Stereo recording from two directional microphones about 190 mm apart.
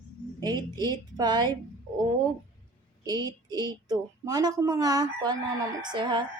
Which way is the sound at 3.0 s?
20° right (ahead or behind).